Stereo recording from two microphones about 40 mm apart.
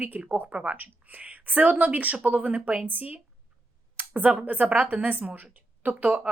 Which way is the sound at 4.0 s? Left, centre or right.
Right.